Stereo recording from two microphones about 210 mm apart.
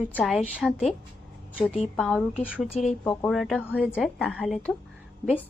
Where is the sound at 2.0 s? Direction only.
Centre (ahead or behind).